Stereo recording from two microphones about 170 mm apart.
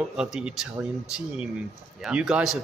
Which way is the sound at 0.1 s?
5° right (ahead or behind).